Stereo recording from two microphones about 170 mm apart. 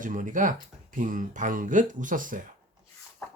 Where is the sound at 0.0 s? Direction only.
50° right (ahead or behind).